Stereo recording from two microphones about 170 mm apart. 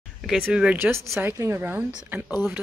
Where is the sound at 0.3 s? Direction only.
5° right (ahead or behind).